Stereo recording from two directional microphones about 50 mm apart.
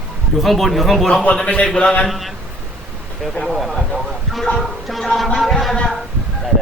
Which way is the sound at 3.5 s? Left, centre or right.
Centre.